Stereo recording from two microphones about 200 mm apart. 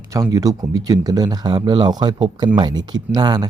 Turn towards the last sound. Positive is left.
turn(degrees=-20)  # may be behind; listen again after turning